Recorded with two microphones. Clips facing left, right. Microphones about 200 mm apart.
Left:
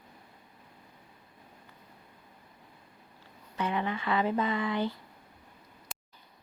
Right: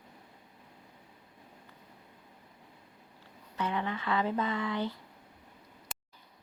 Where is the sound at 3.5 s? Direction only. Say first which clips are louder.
Left 2 dB; 15° left (ahead or behind).